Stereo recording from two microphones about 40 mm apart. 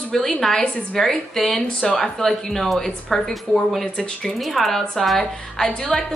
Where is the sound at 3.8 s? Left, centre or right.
Left.